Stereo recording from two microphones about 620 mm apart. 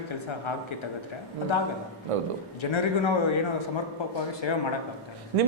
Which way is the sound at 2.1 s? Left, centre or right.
Right.